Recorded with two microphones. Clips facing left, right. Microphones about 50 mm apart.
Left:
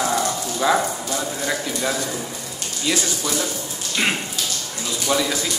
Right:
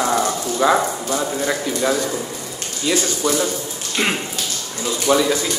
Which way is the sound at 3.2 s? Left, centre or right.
Centre.